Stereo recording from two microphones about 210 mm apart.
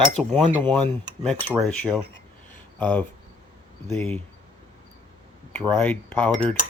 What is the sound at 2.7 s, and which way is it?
Speech, 5° left (ahead or behind).